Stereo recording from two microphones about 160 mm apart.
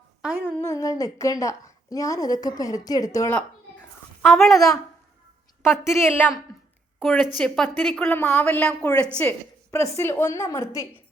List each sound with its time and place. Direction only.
0.2 s a woman's voice: 10° right (ahead or behind)
0.6 s a woman's voice: 20° left (ahead or behind)
4.2 s speech: centre (ahead or behind)
5.6 s a woman's voice: 15° left (ahead or behind)
7.0 s a woman's voice: centre (ahead or behind)
9.7 s a woman's voice: 20° left (ahead or behind)